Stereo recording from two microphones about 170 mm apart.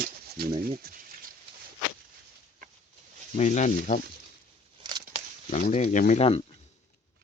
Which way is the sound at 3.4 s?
45° left (ahead or behind).